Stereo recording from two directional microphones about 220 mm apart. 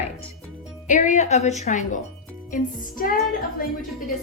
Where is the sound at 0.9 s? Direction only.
35° left (ahead or behind).